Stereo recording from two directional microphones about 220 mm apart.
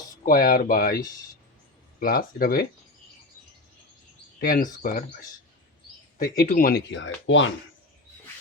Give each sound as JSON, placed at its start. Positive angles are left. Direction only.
{"t": 0.3, "sound": "speech", "side_deg": 40}
{"t": 4.4, "sound": "speech", "side_deg": 40}
{"t": 6.2, "sound": "speech", "side_deg": 40}